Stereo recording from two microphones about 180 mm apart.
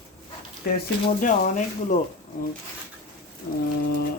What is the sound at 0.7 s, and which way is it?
Speech, 60° left (ahead or behind).